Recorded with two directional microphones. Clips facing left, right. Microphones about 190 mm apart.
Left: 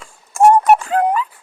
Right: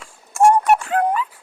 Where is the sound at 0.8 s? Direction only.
20° left (ahead or behind).